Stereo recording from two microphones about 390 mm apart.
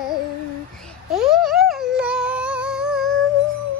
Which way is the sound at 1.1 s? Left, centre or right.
Centre.